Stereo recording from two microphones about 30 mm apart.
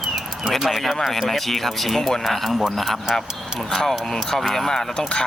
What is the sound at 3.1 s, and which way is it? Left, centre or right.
Speech, centre.